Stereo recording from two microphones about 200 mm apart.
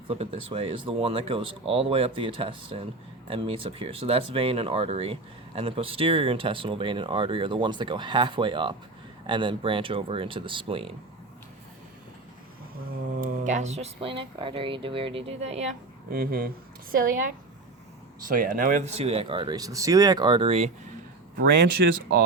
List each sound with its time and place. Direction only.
0.1 s speech: 30° right (ahead or behind)
13.1 s speech: 40° right (ahead or behind)
16.0 s speech: 45° right (ahead or behind); by 20.7 s 25° right (ahead or behind)
21.3 s speech: 60° right (ahead or behind)